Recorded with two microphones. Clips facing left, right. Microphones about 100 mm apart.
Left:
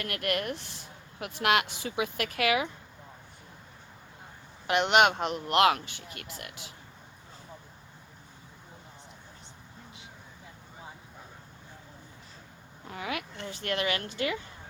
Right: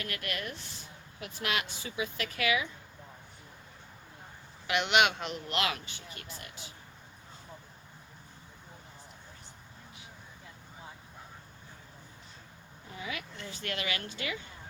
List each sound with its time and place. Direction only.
0.0 s a man's voice: 55° left (ahead or behind)
4.6 s a man's voice: 45° left (ahead or behind); by 6.7 s 70° left (ahead or behind)
12.9 s speech: 65° left (ahead or behind); by 14.3 s 50° left (ahead or behind)